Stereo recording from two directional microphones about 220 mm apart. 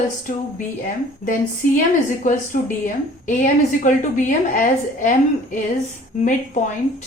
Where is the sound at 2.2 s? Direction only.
35° left (ahead or behind).